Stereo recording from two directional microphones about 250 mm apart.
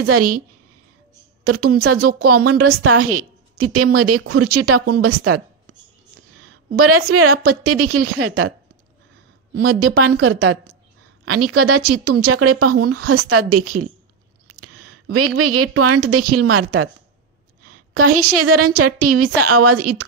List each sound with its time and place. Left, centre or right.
0.0 s a woman's voice: right
1.4 s a woman's voice: right
6.8 s a woman's voice: right
9.8 s a woman's voice: right
14.5 s a sound: right
15.1 s a woman's voice: right
17.6 s a sound: right
18.3 s a woman's voice: right